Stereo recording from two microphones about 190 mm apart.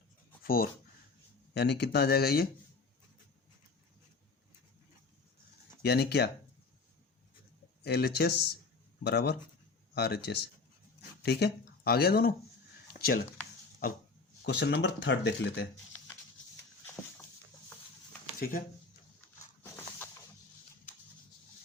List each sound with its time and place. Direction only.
0.4 s speech: 50° left (ahead or behind)
1.5 s speech: 60° left (ahead or behind)
5.8 s speech: 60° left (ahead or behind)
7.9 s speech: 60° left (ahead or behind)
12.9 s a sound: 55° left (ahead or behind)
14.4 s speech: 65° left (ahead or behind)
18.3 s speech: 50° left (ahead or behind)
19.6 s a sound: 10° left (ahead or behind)